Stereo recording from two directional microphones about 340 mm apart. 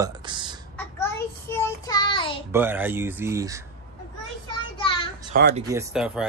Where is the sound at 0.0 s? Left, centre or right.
Centre.